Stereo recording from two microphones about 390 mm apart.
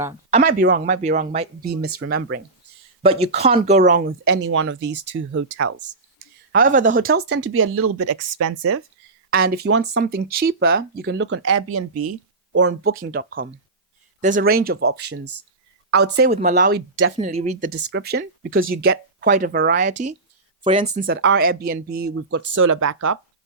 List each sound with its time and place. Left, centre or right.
0.0 s speech: centre; by 6.0 s right
6.5 s speech: right
9.3 s speech: right
17.2 s speech: centre; by 23.1 s right